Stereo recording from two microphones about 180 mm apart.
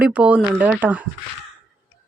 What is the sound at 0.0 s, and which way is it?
Speech, 5° right (ahead or behind).